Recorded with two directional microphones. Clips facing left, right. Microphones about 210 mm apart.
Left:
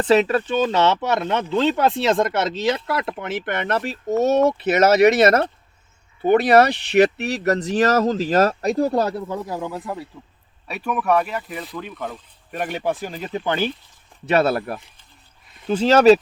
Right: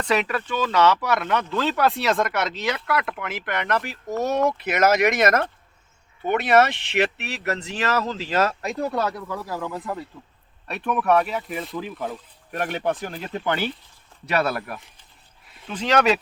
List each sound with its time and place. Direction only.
0.0 s speech: 30° left (ahead or behind); by 13.6 s 10° left (ahead or behind)
14.3 s speech: 30° left (ahead or behind)